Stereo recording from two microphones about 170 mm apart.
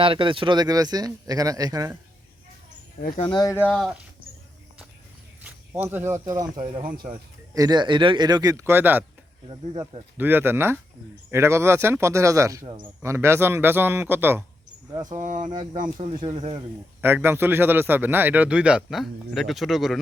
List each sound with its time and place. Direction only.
0.0 s speech: 30° right (ahead or behind)
3.2 s speech: 30° left (ahead or behind)
3.4 s speech: 10° left (ahead or behind)
5.4 s speech: 10° right (ahead or behind)
6.8 s speech: 60° right (ahead or behind)
7.5 s speech: 20° right (ahead or behind)
9.5 s speech: 30° right (ahead or behind)
10.2 s a man's voice: 10° right (ahead or behind); by 12.9 s 30° right (ahead or behind)
13.0 s a man's voice: 15° right (ahead or behind)
14.9 s speech: 25° right (ahead or behind)
15.2 s speech: 50° right (ahead or behind)
16.0 s speech: 30° right (ahead or behind)
17.0 s a man's voice: 15° right (ahead or behind)